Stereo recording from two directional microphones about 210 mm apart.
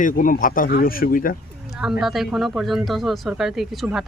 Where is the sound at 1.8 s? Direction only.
5° right (ahead or behind).